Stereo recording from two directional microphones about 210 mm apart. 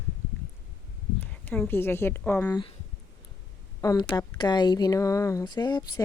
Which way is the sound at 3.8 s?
15° left (ahead or behind).